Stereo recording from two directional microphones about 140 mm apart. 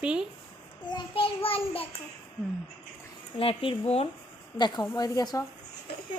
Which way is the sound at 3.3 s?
40° left (ahead or behind).